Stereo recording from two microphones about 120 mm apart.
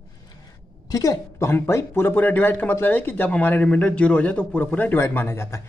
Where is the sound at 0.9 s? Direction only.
30° left (ahead or behind).